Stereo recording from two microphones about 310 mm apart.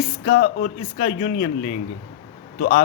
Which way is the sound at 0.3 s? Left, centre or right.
Left.